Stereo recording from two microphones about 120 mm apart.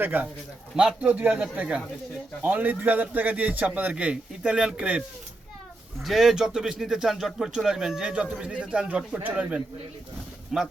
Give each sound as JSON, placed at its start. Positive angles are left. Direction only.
{"t": 0.0, "sound": "a man's voice", "side_deg": -15}